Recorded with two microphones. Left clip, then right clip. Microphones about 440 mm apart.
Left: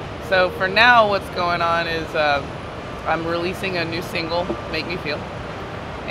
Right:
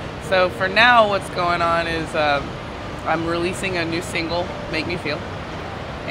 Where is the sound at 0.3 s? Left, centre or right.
Right.